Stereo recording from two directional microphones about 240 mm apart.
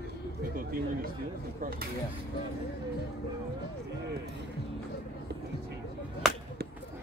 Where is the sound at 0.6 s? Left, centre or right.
Right.